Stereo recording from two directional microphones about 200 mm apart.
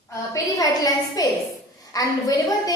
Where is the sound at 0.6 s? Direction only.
20° left (ahead or behind).